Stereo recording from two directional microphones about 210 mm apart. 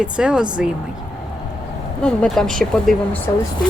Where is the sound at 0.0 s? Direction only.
5° right (ahead or behind).